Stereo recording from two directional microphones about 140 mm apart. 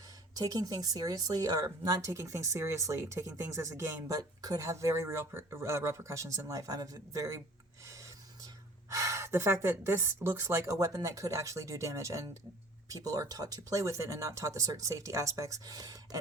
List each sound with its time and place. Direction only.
0.3 s speech: 25° right (ahead or behind)
8.9 s speech: 20° right (ahead or behind)